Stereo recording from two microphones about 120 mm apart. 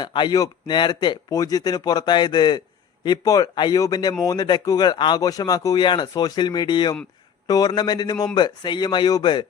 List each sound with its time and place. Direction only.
0.0 s speech: 40° left (ahead or behind)